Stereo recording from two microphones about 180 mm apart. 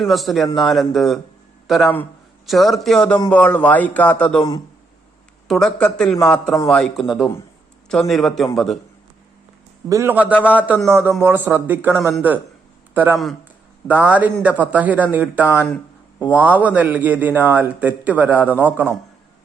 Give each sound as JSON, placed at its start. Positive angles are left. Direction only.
{"t": 0.0, "sound": "a man's voice", "side_deg": 0}
{"t": 5.5, "sound": "speech", "side_deg": 0}
{"t": 9.9, "sound": "a man's voice", "side_deg": -15}
{"t": 15.6, "sound": "a sound", "side_deg": 5}
{"t": 16.3, "sound": "a man's voice", "side_deg": -10}